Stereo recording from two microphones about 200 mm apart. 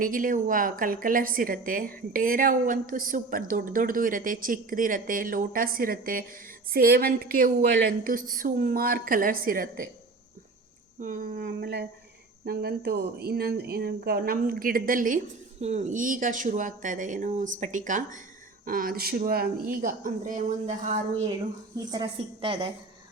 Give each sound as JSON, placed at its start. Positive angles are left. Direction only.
{"t": 0.0, "sound": "a woman's voice", "side_deg": -45}
{"t": 11.0, "sound": "a woman's voice", "side_deg": -40}
{"t": 21.8, "sound": "a woman's voice", "side_deg": -20}